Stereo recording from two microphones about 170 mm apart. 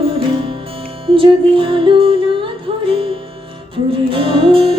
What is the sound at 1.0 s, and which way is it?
Music, 30° right (ahead or behind).